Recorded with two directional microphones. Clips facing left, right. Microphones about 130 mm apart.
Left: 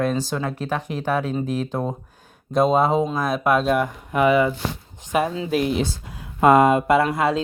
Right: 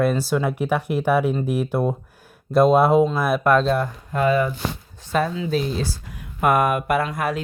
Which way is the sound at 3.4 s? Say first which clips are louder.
Right 1 dB; 10° left (ahead or behind).